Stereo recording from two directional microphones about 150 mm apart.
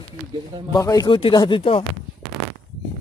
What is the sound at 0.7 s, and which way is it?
Speech, 25° left (ahead or behind).